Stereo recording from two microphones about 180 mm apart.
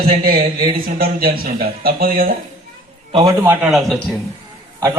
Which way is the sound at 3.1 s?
30° right (ahead or behind).